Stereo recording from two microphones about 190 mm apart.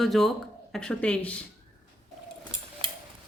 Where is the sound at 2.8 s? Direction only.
30° right (ahead or behind).